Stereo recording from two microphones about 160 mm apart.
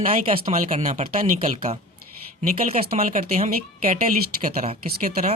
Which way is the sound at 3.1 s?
55° right (ahead or behind).